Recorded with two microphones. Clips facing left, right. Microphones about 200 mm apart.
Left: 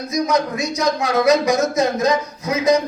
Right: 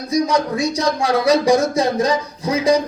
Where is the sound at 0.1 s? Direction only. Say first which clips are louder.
Right 2 dB; 30° right (ahead or behind).